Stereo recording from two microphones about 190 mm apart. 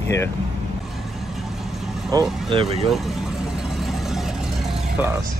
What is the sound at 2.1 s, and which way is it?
Speech, 25° right (ahead or behind).